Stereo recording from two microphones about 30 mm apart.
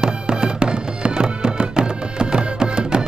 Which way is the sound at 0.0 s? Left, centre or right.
Right.